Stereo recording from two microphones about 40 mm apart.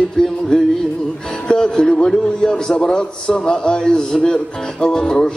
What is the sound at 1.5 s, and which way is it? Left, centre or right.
A man's voice, left.